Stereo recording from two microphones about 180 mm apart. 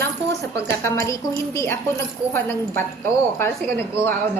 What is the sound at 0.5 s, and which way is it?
A woman's voice, 15° left (ahead or behind).